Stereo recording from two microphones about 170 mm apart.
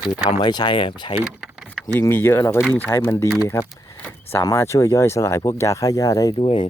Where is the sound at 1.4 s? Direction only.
5° right (ahead or behind).